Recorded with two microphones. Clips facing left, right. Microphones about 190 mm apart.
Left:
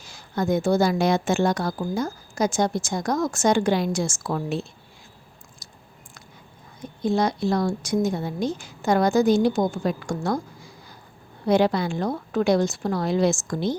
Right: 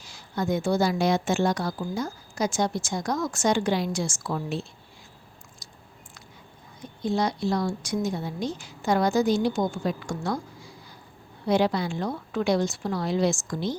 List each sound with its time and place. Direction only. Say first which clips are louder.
0.0 s a woman's voice: left 3 dB; 45° left (ahead or behind)
5.6 s chewing: left 1 dB; 50° left (ahead or behind)
7.0 s a woman's voice: left 3 dB; 50° left (ahead or behind)